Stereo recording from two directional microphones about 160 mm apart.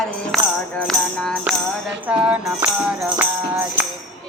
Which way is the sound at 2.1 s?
10° right (ahead or behind).